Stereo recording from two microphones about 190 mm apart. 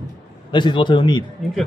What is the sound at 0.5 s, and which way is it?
Speech, 25° left (ahead or behind).